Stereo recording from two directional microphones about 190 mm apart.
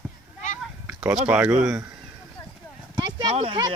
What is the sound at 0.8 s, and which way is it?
Speech, 5° right (ahead or behind).